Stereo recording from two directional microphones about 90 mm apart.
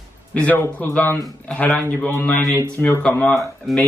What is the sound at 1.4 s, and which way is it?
A man's voice, 15° left (ahead or behind).